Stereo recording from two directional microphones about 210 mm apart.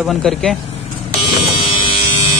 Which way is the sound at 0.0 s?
Centre (ahead or behind).